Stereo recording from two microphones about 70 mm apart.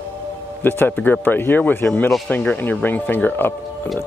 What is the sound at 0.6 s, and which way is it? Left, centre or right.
Speech, left.